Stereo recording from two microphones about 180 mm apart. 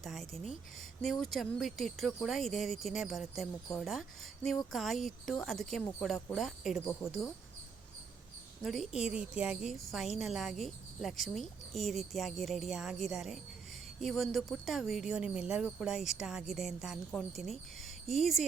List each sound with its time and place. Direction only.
0.0 s a sound: centre (ahead or behind)
1.0 s a woman's voice: centre (ahead or behind)
8.6 s a woman's voice: centre (ahead or behind)